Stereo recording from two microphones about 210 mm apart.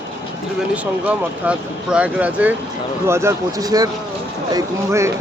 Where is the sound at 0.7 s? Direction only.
5° right (ahead or behind).